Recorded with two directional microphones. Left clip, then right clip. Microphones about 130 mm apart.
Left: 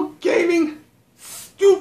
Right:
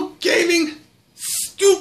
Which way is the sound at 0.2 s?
15° left (ahead or behind).